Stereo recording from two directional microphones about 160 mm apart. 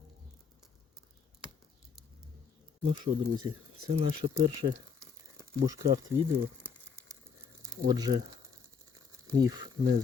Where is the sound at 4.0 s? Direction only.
35° right (ahead or behind).